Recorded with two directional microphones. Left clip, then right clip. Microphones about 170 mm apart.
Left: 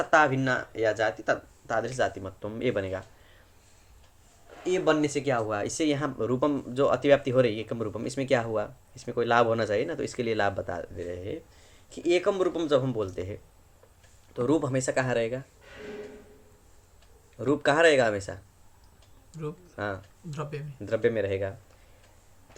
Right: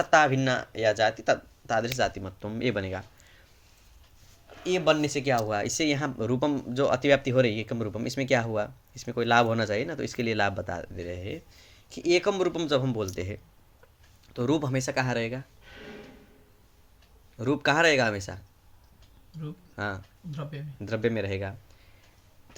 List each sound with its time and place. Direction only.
0.0 s speech: 45° right (ahead or behind)
4.6 s speech: 50° right (ahead or behind); by 15.4 s 30° right (ahead or behind)
17.3 s speech: 35° right (ahead or behind)
19.7 s speech: 35° right (ahead or behind)